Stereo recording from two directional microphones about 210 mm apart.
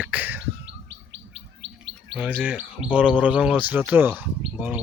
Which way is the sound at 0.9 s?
60° right (ahead or behind).